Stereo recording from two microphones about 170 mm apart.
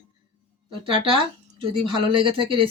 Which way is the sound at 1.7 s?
30° right (ahead or behind).